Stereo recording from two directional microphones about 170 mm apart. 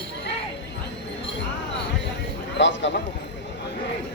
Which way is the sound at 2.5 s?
90° left.